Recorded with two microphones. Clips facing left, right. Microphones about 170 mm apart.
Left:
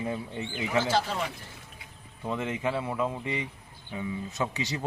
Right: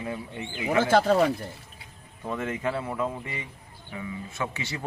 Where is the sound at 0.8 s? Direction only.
55° right (ahead or behind).